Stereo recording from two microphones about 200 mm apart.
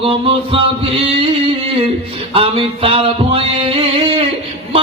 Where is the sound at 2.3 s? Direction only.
25° right (ahead or behind).